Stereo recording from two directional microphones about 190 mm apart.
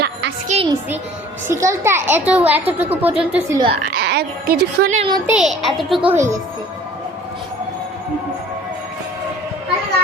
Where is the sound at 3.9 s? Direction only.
60° right (ahead or behind).